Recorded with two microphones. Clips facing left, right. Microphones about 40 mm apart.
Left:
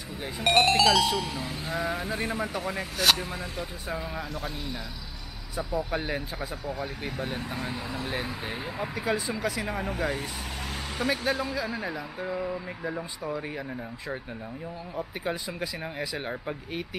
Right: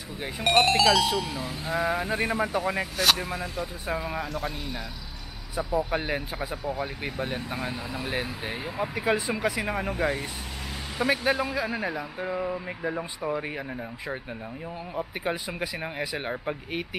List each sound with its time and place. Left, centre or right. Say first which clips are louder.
0.4 s speech: even; centre
3.0 s speech: left 1 dB; centre
9.0 s speech: right 3 dB; centre